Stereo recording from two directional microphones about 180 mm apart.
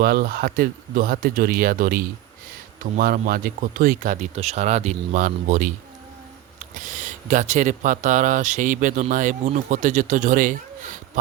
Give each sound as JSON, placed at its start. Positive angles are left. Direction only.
{"t": 0.0, "sound": "speech", "side_deg": -60}
{"t": 6.7, "sound": "speech", "side_deg": -45}